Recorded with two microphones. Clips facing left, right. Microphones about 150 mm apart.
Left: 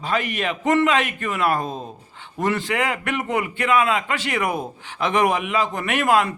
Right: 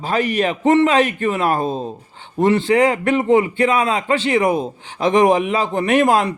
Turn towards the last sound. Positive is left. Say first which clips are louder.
# right 4 dB
turn(degrees=-35)  # may be behind; listen again after turning